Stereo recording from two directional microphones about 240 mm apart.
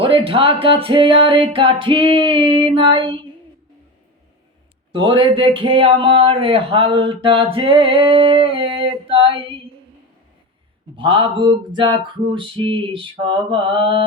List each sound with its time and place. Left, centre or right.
0.0 s speech: right
4.9 s speech: centre
10.9 s speech: right